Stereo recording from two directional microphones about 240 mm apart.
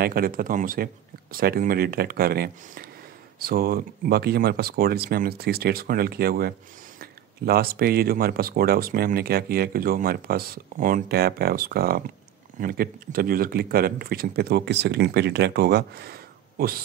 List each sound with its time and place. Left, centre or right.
0.0 s speech: right